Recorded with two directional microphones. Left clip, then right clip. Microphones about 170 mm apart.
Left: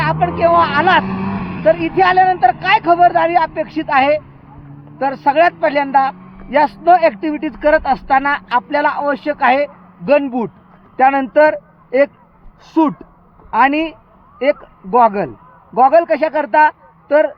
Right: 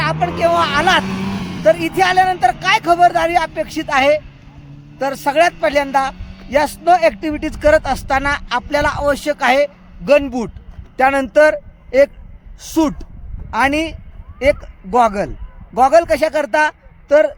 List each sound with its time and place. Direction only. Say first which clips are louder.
0.0 s a man's voice: left 2 dB; 10° right (ahead or behind)
1.0 s vehicle: left 1 dB; 20° left (ahead or behind)
1.6 s a man's voice: left 1 dB; 10° right (ahead or behind)
13.5 s a man's voice: left 3 dB; 15° right (ahead or behind)